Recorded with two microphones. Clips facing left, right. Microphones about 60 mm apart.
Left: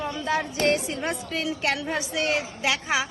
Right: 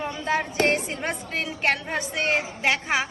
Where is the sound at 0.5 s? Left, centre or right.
Right.